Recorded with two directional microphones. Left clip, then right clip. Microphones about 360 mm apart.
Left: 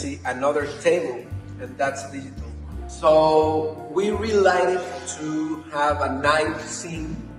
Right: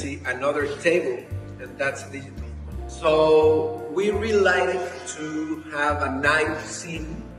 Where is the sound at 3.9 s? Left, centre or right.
Centre.